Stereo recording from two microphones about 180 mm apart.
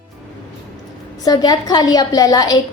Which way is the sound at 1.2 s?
20° left (ahead or behind).